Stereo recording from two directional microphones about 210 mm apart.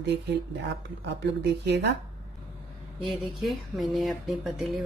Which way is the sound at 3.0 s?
Centre (ahead or behind).